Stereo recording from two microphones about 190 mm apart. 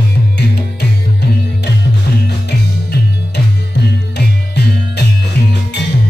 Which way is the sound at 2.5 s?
60° left (ahead or behind).